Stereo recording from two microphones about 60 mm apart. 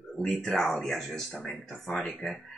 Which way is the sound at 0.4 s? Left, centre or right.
Centre.